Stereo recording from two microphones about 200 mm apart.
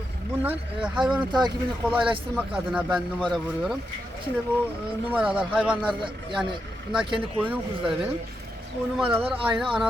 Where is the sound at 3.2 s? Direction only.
Centre (ahead or behind).